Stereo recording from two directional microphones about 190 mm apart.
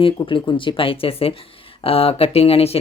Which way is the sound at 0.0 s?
25° left (ahead or behind).